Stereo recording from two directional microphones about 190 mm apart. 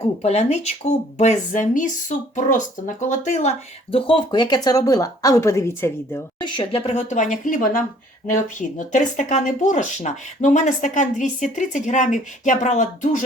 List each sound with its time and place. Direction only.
0.0 s speech: 35° left (ahead or behind)
3.9 s speech: 25° left (ahead or behind)
6.4 s speech: 25° left (ahead or behind); by 13.2 s 40° left (ahead or behind)